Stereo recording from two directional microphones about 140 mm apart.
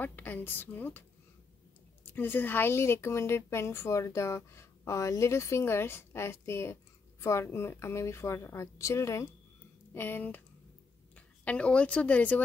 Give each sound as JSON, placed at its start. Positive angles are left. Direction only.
{"t": 0.0, "sound": "a woman's voice", "side_deg": 15}
{"t": 2.1, "sound": "a woman's voice", "side_deg": 15}